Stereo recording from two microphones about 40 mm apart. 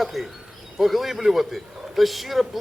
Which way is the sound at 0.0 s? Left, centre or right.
Centre.